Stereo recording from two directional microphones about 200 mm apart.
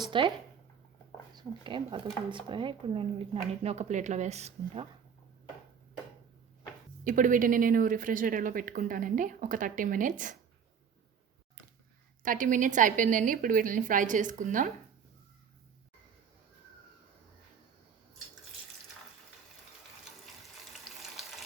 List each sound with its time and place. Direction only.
0.0 s speech: 20° right (ahead or behind)
1.4 s a woman's voice: 25° right (ahead or behind)
7.0 s a woman's voice: 40° right (ahead or behind)
12.2 s a woman's voice: 40° right (ahead or behind)